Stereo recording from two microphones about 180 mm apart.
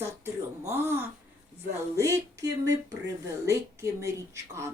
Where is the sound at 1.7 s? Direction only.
15° right (ahead or behind).